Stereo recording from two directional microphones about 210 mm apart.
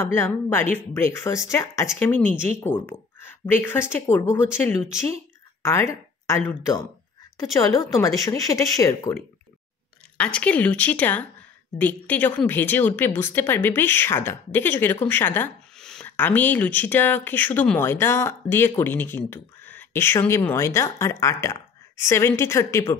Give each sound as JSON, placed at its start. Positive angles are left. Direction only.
{"t": 0.0, "sound": "speech", "side_deg": 10}
{"t": 5.6, "sound": "speech", "side_deg": 15}